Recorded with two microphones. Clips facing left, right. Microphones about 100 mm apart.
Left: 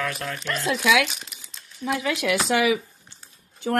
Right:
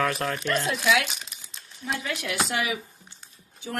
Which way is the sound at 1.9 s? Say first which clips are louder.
Left 7 dB; 90° left.